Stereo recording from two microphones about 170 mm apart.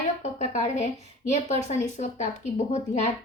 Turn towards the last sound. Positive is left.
turn(degrees=40)  # may be behind; listen again after turning